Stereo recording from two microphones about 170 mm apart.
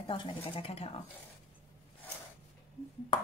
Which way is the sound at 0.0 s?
30° left (ahead or behind).